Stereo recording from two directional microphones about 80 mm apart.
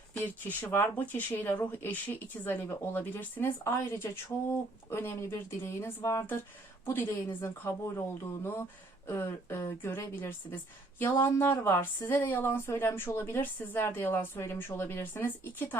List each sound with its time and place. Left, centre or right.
0.2 s a woman's voice: left